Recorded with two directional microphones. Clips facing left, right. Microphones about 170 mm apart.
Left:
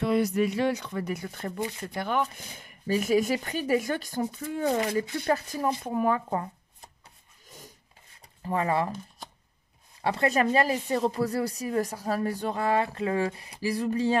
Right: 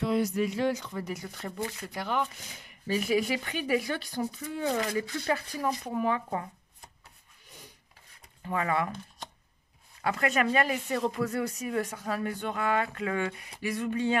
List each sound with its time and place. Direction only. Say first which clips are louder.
0.0 s speech: left 3 dB; 65° left (ahead or behind); by 6.4 s 45° left (ahead or behind)
8.5 s speech: left 3 dB; 35° left (ahead or behind)
10.0 s speech: left 3 dB; 30° left (ahead or behind)